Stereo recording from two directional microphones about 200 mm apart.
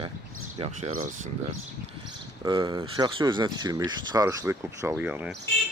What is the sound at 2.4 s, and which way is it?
Speech, 15° right (ahead or behind).